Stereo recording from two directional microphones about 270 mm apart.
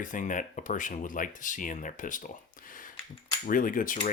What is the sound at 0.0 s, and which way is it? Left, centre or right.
Speech, left.